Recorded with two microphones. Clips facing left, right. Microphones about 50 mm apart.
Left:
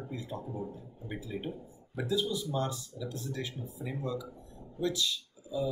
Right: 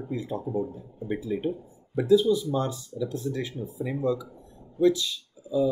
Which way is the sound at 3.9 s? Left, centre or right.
Right.